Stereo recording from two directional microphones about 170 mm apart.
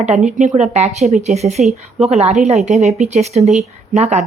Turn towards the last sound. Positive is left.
turn(degrees=-40)  # may be behind; listen again after turning